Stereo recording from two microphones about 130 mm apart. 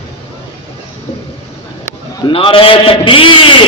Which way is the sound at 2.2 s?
40° left (ahead or behind).